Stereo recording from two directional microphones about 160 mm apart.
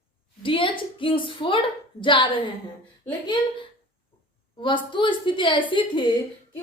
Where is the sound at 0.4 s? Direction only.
30° left (ahead or behind).